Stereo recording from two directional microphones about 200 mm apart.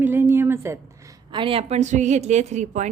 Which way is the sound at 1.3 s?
25° right (ahead or behind).